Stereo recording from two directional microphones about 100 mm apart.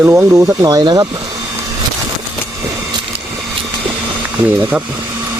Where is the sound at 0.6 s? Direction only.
40° right (ahead or behind).